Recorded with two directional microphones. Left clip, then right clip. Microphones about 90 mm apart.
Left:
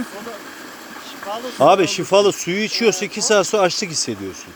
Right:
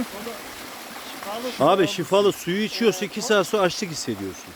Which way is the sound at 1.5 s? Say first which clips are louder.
Left 6 dB; 10° right (ahead or behind).